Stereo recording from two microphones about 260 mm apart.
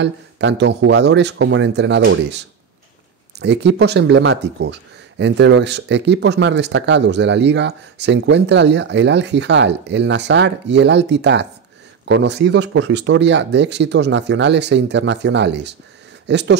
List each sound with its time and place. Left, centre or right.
0.0 s speech: right